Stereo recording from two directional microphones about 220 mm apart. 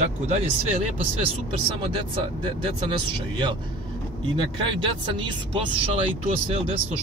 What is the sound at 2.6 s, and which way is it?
Speech, 20° right (ahead or behind).